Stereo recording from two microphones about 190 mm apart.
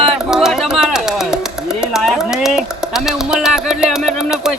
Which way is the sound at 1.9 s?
Centre (ahead or behind).